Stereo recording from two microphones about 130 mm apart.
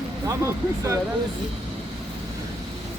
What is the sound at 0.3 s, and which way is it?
Speech, 25° right (ahead or behind).